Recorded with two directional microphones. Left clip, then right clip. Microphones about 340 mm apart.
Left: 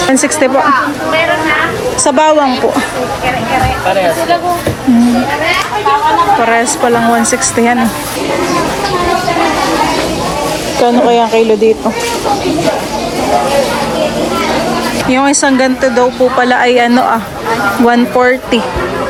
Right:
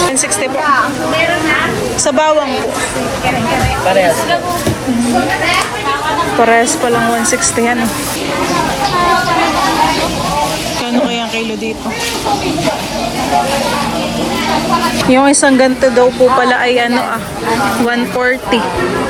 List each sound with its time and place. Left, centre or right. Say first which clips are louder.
2.0 s speech: left 3 dB; centre
6.4 s speech: even; centre
10.8 s speech: left 10 dB; centre
15.1 s speech: right 1 dB; centre